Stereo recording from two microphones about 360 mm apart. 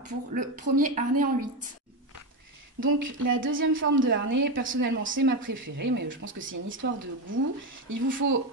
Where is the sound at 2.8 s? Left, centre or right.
Right.